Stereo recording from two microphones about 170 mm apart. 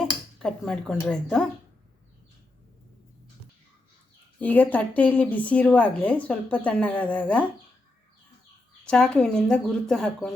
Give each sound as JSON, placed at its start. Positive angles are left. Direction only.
{"t": 0.3, "sound": "speech", "side_deg": 5}
{"t": 4.4, "sound": "speech", "side_deg": 10}
{"t": 8.8, "sound": "speech", "side_deg": 5}